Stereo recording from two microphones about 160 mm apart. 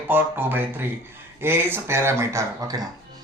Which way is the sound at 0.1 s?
15° right (ahead or behind).